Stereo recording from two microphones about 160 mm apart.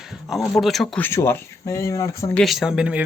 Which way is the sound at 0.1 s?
Centre (ahead or behind).